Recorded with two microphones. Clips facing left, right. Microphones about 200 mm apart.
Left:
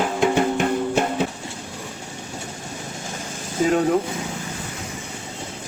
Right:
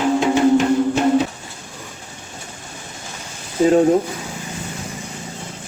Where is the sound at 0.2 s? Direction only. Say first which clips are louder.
Right 3 dB; 55° left (ahead or behind).